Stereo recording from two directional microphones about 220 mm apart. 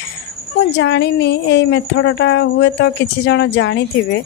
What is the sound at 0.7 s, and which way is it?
A woman's voice, 50° left (ahead or behind).